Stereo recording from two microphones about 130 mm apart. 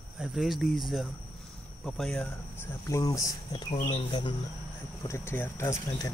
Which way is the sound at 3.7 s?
40° left (ahead or behind).